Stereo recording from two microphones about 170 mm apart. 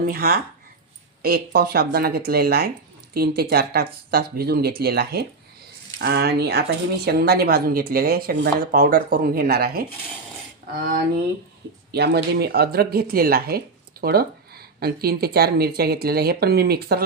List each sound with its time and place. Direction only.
0.0 s speech: 60° right (ahead or behind)
11.9 s speech: 75° right (ahead or behind)